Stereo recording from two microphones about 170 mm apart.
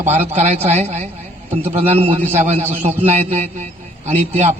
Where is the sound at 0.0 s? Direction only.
40° right (ahead or behind).